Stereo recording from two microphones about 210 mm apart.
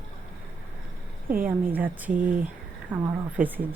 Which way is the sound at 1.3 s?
40° right (ahead or behind).